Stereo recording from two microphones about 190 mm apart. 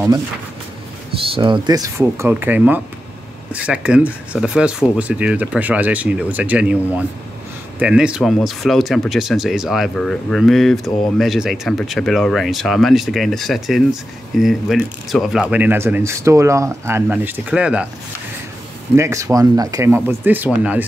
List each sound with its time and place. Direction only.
1.1 s speech: 30° right (ahead or behind); by 6.8 s 5° right (ahead or behind)
7.8 s speech: 5° right (ahead or behind)
18.9 s speech: 15° right (ahead or behind)